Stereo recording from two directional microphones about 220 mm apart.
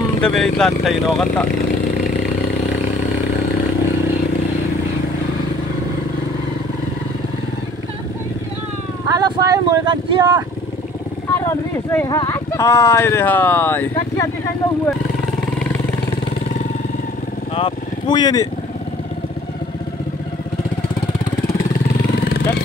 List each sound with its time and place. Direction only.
0.2 s speech: centre (ahead or behind)
9.1 s vehicle: 15° right (ahead or behind)
11.3 s speech: 10° left (ahead or behind)
17.6 s vehicle: 20° left (ahead or behind)